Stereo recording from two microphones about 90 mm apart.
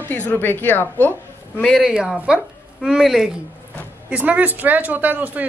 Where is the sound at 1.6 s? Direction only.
5° left (ahead or behind).